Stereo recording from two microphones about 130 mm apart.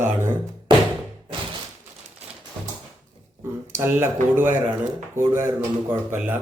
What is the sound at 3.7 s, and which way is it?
A man's voice, 15° right (ahead or behind).